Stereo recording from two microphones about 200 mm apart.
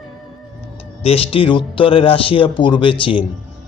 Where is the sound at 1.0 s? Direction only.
30° left (ahead or behind).